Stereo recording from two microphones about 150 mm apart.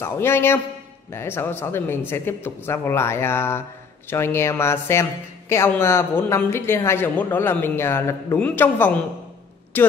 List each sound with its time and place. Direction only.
0.0 s speech: 15° left (ahead or behind)